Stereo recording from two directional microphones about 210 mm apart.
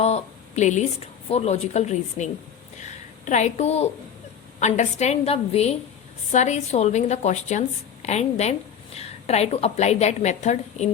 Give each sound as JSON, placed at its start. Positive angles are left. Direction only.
{"t": 0.0, "sound": "a woman's voice", "side_deg": 30}